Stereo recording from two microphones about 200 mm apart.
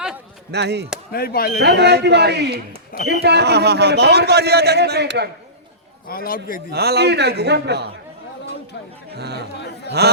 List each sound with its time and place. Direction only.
0.5 s a man's voice: 55° right (ahead or behind)
1.1 s a man's voice: 50° left (ahead or behind)
1.6 s a man's voice: 55° right (ahead or behind)
6.1 s a man's voice: 45° left (ahead or behind)
6.7 s a man's voice: 55° right (ahead or behind)
9.1 s a man's voice: 55° right (ahead or behind)
10.0 s a sound: 55° right (ahead or behind)